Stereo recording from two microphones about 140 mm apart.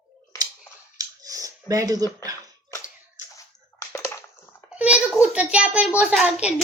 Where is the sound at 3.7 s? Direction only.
20° left (ahead or behind).